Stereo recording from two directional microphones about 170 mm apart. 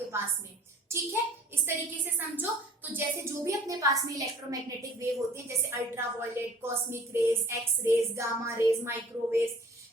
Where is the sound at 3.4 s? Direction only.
20° right (ahead or behind).